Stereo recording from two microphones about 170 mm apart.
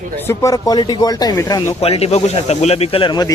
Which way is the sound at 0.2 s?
15° left (ahead or behind).